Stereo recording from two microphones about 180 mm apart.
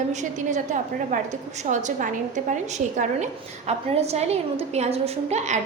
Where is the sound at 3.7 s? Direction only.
35° right (ahead or behind).